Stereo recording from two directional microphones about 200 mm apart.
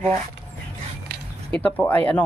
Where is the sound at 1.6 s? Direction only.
5° left (ahead or behind).